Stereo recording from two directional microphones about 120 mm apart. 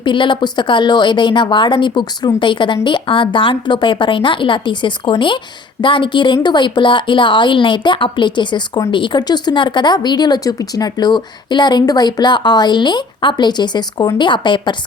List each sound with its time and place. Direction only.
0.0 s speech: 45° left (ahead or behind)